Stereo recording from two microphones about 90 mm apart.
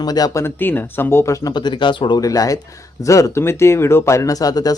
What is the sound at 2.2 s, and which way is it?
Speech, 40° left (ahead or behind).